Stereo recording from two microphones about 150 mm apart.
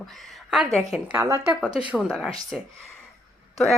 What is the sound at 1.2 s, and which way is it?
Speech, 20° right (ahead or behind).